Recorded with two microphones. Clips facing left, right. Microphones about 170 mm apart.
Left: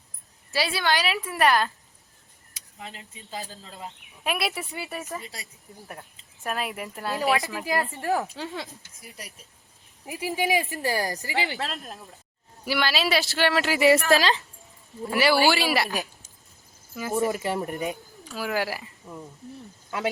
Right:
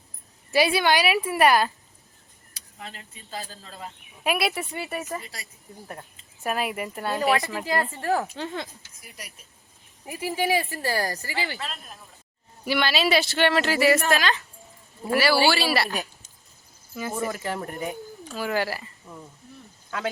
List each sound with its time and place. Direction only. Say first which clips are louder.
0.5 s a woman's voice: right 5 dB; 15° right (ahead or behind)
2.5 s speech: even; 20° left (ahead or behind)
4.2 s speech: right 3 dB; 5° right (ahead or behind)
5.2 s speech: left 1 dB; 20° left (ahead or behind)
5.9 s speech: right 2 dB; centre (ahead or behind)
7.6 s speech: right 1 dB; 15° left (ahead or behind)
8.2 s speech: right 2 dB; centre (ahead or behind)
10.1 s speech: right 1 dB; 15° left (ahead or behind)
12.6 s speech: right 2 dB; centre (ahead or behind)
13.7 s speech: left 2 dB; 20° left (ahead or behind)
16.9 s speech: left 3 dB; centre (ahead or behind)
17.2 s speech: left 3 dB; 15° left (ahead or behind)
18.3 s speech: right 1 dB; 5° left (ahead or behind)